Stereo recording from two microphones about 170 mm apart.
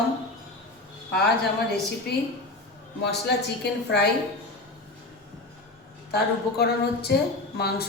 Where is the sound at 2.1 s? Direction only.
65° left (ahead or behind).